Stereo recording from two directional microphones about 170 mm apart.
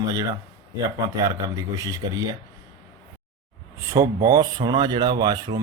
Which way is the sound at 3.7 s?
20° right (ahead or behind).